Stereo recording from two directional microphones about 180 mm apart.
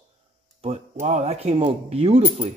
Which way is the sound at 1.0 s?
35° right (ahead or behind).